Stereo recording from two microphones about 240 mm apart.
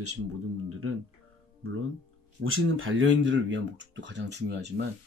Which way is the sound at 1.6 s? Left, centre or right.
Right.